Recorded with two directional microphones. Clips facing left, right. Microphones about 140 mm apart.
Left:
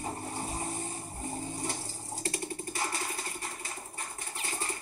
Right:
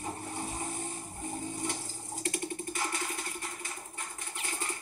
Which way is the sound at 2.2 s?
35° left (ahead or behind).